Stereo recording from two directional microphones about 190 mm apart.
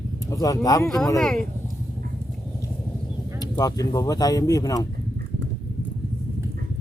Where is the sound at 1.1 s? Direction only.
5° left (ahead or behind).